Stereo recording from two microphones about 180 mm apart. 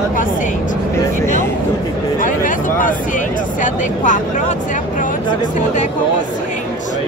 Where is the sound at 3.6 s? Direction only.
45° left (ahead or behind).